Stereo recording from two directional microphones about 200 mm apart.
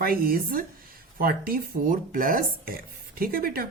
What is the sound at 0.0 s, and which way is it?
Speech, 45° right (ahead or behind).